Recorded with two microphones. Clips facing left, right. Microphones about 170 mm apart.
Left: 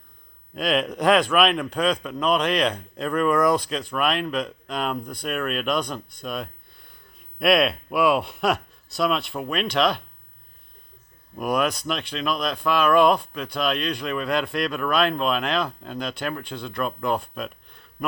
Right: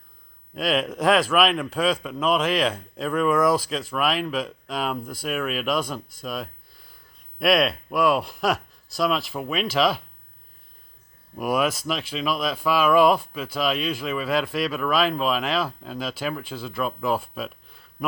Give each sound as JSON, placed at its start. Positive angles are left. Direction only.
{"t": 0.5, "sound": "a man's voice", "side_deg": 0}
{"t": 11.3, "sound": "a man's voice", "side_deg": -5}